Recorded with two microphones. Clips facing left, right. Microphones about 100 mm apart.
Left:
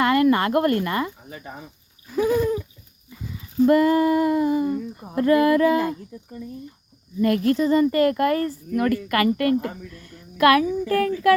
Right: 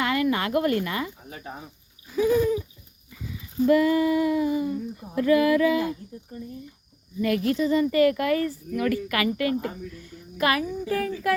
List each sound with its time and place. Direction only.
0.0 s speech: 50° left (ahead or behind)
2.1 s a sound: 55° left (ahead or behind)
3.7 s female singing: 45° left (ahead or behind)
7.2 s female singing: 45° left (ahead or behind)
8.7 s a woman's voice: 50° left (ahead or behind); by 11.3 s 65° left (ahead or behind)